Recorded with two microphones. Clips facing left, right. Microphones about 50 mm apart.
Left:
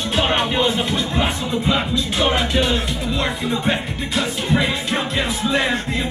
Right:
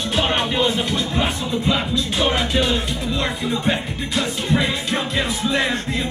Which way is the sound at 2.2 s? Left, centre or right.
Centre.